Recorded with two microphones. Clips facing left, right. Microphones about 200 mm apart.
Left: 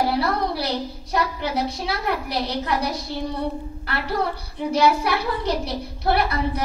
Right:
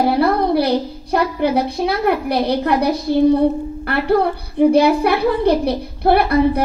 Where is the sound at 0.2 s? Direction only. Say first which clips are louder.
Right 9 dB; 55° right (ahead or behind).